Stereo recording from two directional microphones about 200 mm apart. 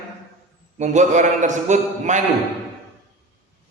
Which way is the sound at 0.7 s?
35° right (ahead or behind).